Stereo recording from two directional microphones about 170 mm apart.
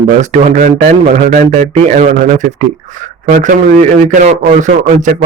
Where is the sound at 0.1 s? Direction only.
45° right (ahead or behind).